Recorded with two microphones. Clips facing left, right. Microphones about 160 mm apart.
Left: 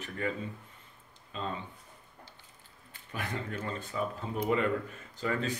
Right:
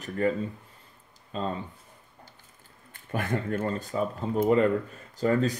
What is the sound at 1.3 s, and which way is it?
Speech, 40° right (ahead or behind).